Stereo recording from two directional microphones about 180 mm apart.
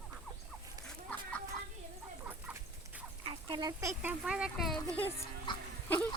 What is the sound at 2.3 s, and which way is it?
Dog, 10° right (ahead or behind).